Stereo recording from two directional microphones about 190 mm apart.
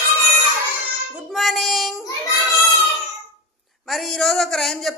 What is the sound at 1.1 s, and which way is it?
Child singing, centre (ahead or behind).